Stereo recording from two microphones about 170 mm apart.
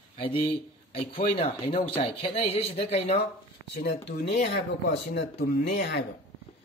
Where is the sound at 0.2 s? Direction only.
35° left (ahead or behind).